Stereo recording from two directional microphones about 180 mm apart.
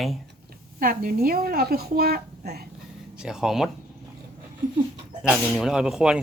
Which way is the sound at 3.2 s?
5° right (ahead or behind).